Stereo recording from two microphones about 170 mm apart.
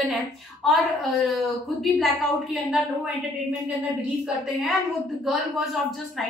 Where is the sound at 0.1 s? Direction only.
Centre (ahead or behind).